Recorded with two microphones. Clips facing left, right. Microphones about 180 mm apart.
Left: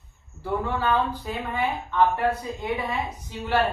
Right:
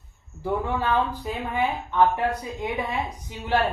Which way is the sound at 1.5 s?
15° right (ahead or behind).